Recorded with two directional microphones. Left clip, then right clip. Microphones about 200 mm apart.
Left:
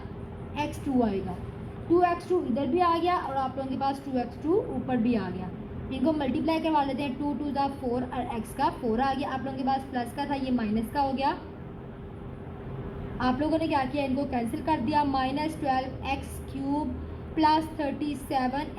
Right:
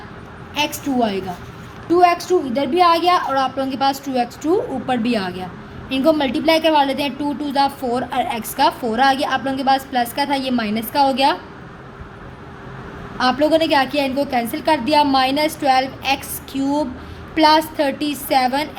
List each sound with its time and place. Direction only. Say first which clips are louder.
0.5 s a woman's voice: right 9 dB; 30° right (ahead or behind)
13.1 s a woman's voice: right 12 dB; 30° right (ahead or behind)